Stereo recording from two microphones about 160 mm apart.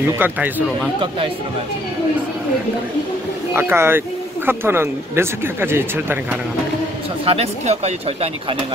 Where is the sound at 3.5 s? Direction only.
15° right (ahead or behind).